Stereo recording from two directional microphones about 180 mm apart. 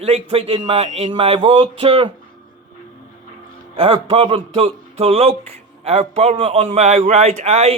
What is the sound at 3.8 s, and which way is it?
A man's voice, 30° right (ahead or behind).